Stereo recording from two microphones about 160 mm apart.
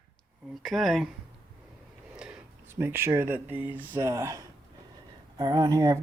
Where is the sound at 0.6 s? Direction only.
Centre (ahead or behind).